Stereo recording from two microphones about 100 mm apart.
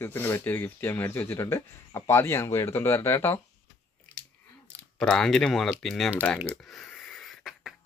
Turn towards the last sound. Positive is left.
turn(degrees=0)  # may be behind; listen again after turning